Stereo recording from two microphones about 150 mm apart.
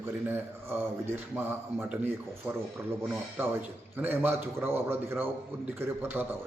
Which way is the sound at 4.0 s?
10° right (ahead or behind).